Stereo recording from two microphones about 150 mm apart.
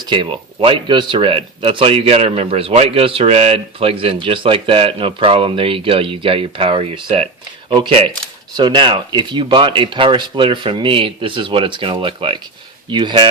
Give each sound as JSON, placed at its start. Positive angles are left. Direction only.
{"t": 0.1, "sound": "a man's voice", "side_deg": -30}